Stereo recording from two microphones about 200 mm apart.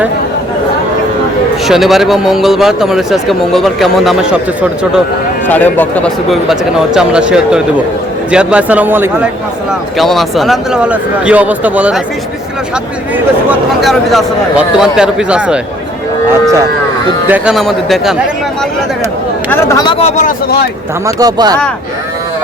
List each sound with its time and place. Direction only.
1.6 s a man's voice: centre (ahead or behind)
5.5 s a man's voice: 10° left (ahead or behind)
13.8 s a man's voice: centre (ahead or behind)
17.2 s a man's voice: 5° right (ahead or behind)
19.5 s speech: 15° left (ahead or behind); by 20.3 s 35° left (ahead or behind)
21.2 s speech: 20° right (ahead or behind)